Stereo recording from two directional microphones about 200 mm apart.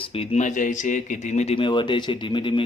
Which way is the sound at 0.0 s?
30° left (ahead or behind).